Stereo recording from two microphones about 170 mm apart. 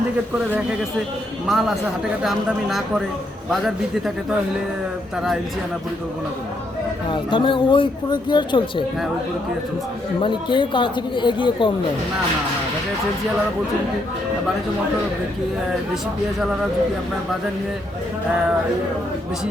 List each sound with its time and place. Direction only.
1.5 s a man's voice: centre (ahead or behind)
7.1 s speech: 30° left (ahead or behind)
10.2 s speech: 30° left (ahead or behind)